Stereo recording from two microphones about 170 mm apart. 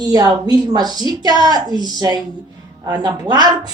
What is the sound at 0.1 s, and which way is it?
A woman's voice, 25° right (ahead or behind).